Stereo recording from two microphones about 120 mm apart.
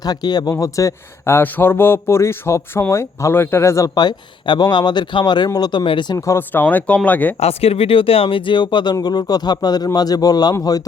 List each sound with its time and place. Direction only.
0.0 s speech: 35° left (ahead or behind)
6.1 s speech: 25° left (ahead or behind)
7.3 s speech: 60° left (ahead or behind); by 10.8 s 30° left (ahead or behind)